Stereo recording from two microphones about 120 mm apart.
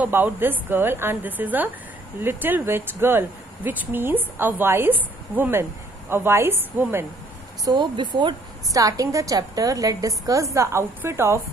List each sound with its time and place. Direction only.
0.0 s speech: 15° right (ahead or behind)
7.6 s speech: 40° right (ahead or behind)
8.7 s a woman's voice: 30° right (ahead or behind)